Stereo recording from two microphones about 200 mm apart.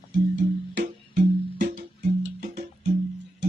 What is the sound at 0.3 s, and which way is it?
Music, 60° right (ahead or behind).